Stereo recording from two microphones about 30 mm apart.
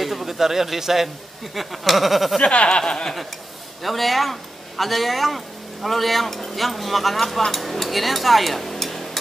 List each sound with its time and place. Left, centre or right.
0.0 s speech: centre
2.4 s speech: left
3.8 s speech: centre
7.5 s a sound: centre